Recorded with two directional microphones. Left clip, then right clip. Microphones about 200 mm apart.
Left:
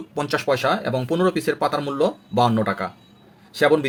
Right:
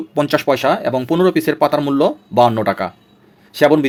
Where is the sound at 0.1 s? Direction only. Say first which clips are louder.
Right 6 dB; 40° right (ahead or behind).